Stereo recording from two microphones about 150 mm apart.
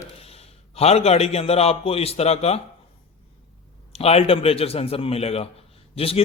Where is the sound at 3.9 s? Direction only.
45° left (ahead or behind).